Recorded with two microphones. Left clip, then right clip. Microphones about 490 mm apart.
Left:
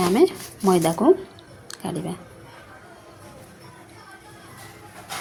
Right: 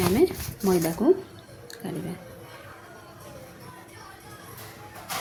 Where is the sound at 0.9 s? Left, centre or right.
Right.